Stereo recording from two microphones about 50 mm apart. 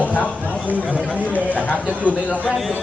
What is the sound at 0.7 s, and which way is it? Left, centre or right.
Speech, right.